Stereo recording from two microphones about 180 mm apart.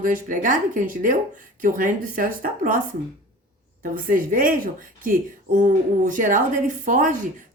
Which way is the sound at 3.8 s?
50° right (ahead or behind).